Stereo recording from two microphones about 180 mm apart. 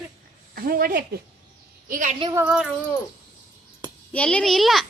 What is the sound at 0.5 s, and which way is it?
A woman's voice, 55° right (ahead or behind).